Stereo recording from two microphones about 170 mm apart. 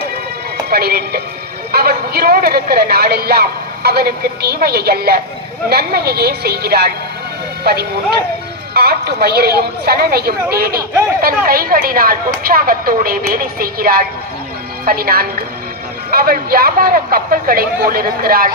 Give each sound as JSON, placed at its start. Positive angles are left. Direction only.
{"t": 0.7, "sound": "a woman's voice", "side_deg": -65}